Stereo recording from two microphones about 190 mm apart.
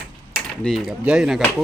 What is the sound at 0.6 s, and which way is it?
Speech, centre (ahead or behind).